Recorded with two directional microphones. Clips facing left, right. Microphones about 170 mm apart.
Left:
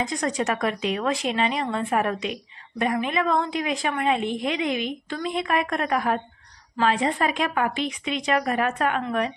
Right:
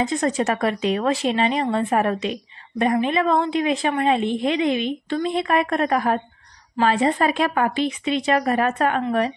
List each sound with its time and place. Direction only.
0.0 s a woman's voice: 25° right (ahead or behind)